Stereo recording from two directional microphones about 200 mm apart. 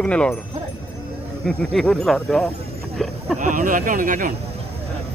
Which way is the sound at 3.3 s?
40° right (ahead or behind).